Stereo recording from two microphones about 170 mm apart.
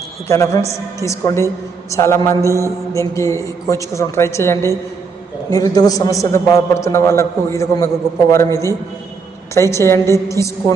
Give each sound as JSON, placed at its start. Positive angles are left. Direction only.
{"t": 0.3, "sound": "a man's voice", "side_deg": 20}
{"t": 2.4, "sound": "mantra", "side_deg": -20}
{"t": 2.9, "sound": "a man's voice", "side_deg": 15}